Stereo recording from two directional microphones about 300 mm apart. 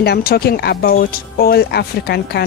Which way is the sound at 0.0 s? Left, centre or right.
Left.